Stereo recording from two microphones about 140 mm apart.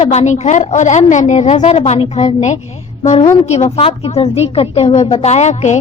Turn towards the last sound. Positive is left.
turn(degrees=55)  # may be behind; listen again after turning